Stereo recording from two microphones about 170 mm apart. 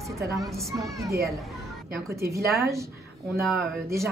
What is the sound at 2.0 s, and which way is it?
Speech, 15° right (ahead or behind).